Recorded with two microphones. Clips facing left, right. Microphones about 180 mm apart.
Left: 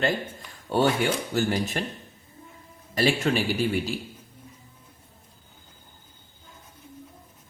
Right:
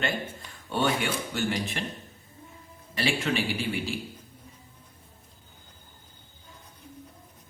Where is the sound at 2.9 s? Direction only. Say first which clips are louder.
Left 4 dB; 40° left (ahead or behind).